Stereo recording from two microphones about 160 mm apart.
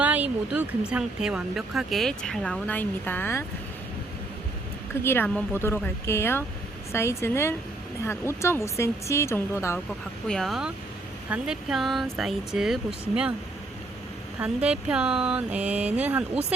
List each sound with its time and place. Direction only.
0.0 s speech: 10° right (ahead or behind); by 3.4 s 15° left (ahead or behind)
5.0 s speech: 15° left (ahead or behind)
10.2 s speech: centre (ahead or behind)
14.3 s speech: 5° right (ahead or behind)